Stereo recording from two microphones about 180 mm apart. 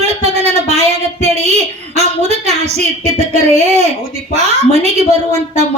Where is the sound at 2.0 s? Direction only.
35° right (ahead or behind).